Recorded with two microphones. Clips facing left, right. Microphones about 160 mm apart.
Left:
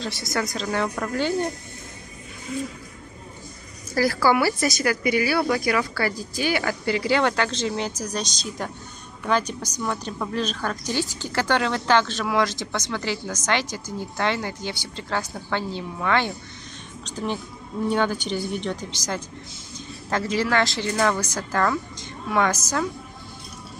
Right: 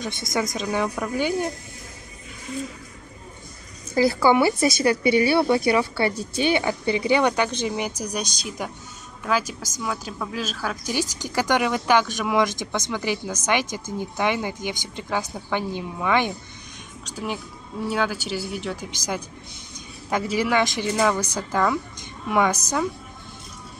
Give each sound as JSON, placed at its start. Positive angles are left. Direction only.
{"t": 0.0, "sound": "a woman's voice", "side_deg": -20}
{"t": 3.9, "sound": "a woman's voice", "side_deg": -20}